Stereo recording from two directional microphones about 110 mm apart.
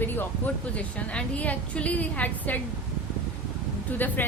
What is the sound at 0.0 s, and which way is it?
Speech, 15° left (ahead or behind).